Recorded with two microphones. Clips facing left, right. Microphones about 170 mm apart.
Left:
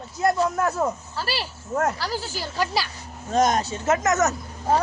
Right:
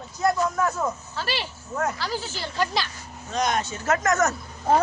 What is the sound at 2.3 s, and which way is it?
Speech, 10° left (ahead or behind).